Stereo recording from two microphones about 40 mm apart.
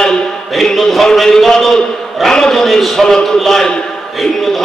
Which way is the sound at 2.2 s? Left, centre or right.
Centre.